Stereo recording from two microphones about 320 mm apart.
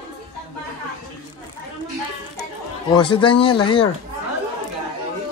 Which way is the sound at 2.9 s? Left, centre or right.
Centre.